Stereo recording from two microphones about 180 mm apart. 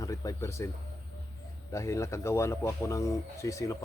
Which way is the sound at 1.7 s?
15° left (ahead or behind).